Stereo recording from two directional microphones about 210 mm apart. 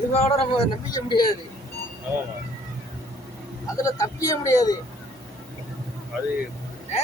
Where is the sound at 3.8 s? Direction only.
15° left (ahead or behind).